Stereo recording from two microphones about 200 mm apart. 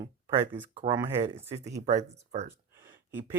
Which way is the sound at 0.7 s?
25° right (ahead or behind).